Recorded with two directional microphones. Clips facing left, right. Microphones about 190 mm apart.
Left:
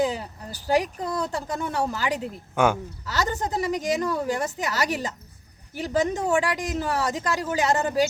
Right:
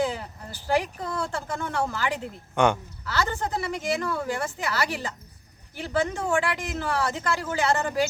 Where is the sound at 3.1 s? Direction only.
40° left (ahead or behind).